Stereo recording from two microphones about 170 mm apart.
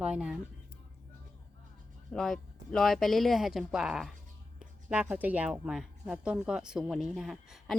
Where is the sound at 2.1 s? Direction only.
Centre (ahead or behind).